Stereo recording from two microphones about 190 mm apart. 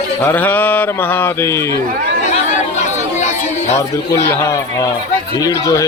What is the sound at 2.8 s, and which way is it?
Chatter, 40° left (ahead or behind).